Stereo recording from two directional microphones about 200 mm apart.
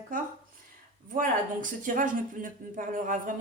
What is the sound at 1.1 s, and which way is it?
Speech, 40° right (ahead or behind).